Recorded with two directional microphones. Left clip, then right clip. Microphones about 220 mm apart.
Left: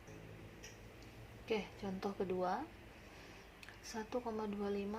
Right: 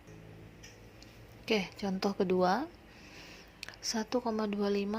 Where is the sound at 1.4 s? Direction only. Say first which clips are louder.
Right 8 dB; 40° right (ahead or behind).